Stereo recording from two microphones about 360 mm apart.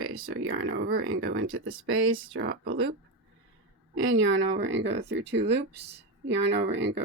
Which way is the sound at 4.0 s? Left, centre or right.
Right.